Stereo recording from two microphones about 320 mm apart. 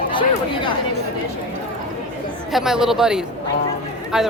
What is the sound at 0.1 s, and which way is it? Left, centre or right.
Speech, centre.